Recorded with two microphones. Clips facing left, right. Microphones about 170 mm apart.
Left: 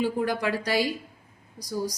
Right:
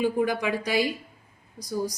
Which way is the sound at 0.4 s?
20° right (ahead or behind).